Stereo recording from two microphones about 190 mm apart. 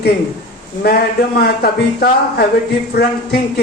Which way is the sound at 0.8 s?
55° left (ahead or behind).